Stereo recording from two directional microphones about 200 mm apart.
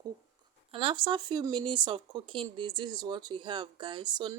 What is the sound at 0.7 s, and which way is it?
Speech, 25° right (ahead or behind).